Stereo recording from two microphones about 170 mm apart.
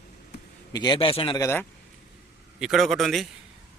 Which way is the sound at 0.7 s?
25° left (ahead or behind).